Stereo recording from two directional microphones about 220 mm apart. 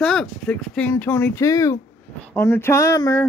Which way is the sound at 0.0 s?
5° left (ahead or behind).